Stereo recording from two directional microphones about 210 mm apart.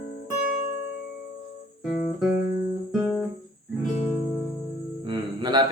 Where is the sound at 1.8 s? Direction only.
5° right (ahead or behind).